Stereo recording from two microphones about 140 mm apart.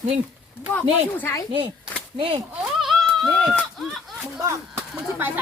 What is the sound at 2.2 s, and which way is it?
Speech, 35° right (ahead or behind).